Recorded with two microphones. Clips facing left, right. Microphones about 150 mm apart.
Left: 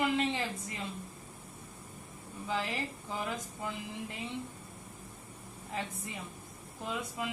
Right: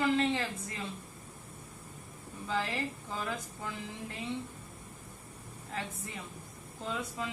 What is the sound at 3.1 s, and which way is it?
Speech, 15° left (ahead or behind).